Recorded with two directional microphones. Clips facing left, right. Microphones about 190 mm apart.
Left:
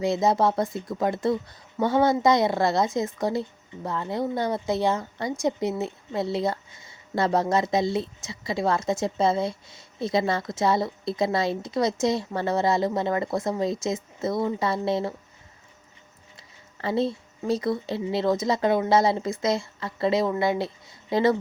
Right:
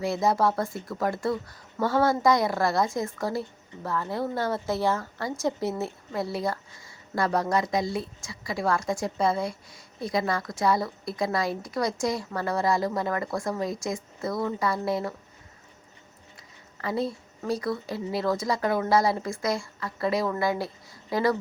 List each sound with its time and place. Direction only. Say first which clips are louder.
0.0 s speech: left 2 dB; 20° left (ahead or behind)
16.8 s a woman's voice: left 4 dB; 25° left (ahead or behind)